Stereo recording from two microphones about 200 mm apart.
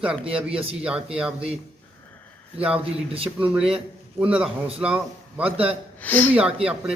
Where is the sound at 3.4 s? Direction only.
5° right (ahead or behind).